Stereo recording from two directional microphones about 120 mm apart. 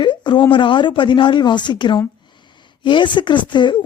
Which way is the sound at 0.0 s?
40° left (ahead or behind).